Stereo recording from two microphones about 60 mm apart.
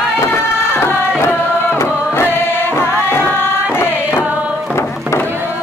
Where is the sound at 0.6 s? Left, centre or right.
Left.